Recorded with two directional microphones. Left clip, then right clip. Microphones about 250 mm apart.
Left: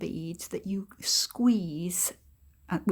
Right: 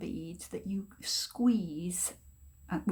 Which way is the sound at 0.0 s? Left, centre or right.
Left.